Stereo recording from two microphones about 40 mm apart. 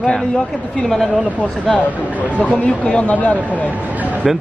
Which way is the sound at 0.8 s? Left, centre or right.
Centre.